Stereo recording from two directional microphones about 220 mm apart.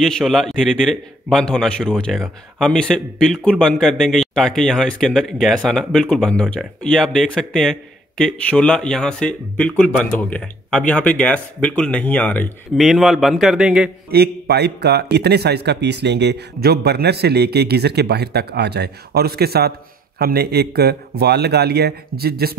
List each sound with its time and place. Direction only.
0.0 s a man's voice: centre (ahead or behind)
14.1 s speech: 45° right (ahead or behind)